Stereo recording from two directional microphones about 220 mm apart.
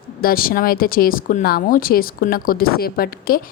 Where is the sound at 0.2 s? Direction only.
40° left (ahead or behind).